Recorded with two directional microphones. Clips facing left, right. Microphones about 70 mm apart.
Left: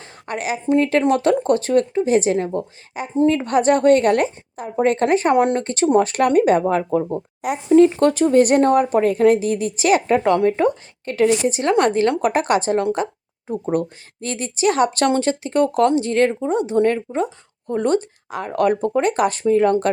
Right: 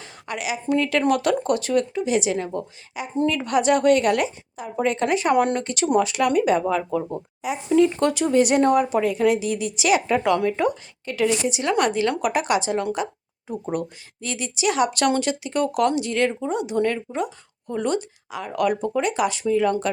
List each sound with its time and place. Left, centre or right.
0.0 s speech: left
6.1 s speech: left
7.4 s speech: left
8.0 s speech: left